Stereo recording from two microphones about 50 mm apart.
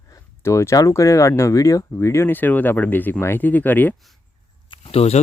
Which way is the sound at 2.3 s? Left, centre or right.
Left.